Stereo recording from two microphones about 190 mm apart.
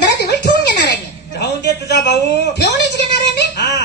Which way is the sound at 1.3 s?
60° left (ahead or behind).